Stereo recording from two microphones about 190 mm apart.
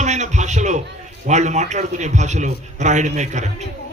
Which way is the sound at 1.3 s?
40° right (ahead or behind).